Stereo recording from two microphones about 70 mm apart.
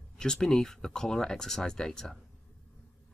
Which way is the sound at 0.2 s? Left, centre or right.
Centre.